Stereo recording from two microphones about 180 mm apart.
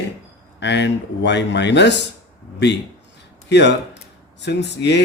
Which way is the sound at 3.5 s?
70° left (ahead or behind).